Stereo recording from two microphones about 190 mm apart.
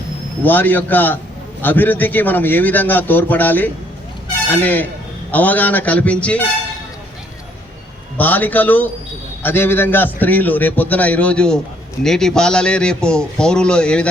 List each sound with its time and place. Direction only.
0.4 s a man's voice: 10° left (ahead or behind)
8.2 s a man's voice: 10° left (ahead or behind)